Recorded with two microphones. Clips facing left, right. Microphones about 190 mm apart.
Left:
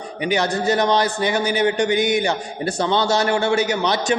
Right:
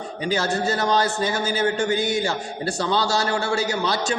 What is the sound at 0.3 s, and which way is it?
A man's voice, 15° left (ahead or behind).